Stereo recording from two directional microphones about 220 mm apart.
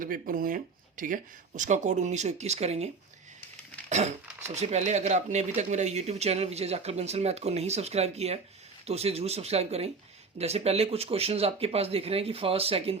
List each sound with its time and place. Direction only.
0.0 s speech: 40° right (ahead or behind)